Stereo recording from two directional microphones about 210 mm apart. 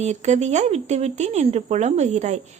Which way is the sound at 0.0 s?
35° right (ahead or behind).